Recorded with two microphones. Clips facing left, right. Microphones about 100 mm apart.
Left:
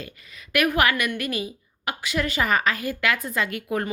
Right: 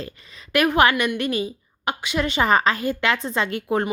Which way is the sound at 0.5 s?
30° right (ahead or behind).